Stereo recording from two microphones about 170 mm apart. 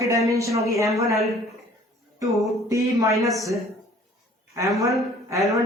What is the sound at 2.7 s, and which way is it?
Speech, 20° right (ahead or behind).